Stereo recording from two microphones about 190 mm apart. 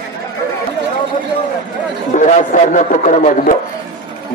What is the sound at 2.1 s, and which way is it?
A man's voice, 40° left (ahead or behind).